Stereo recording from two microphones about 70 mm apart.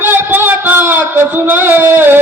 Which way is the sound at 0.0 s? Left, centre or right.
Right.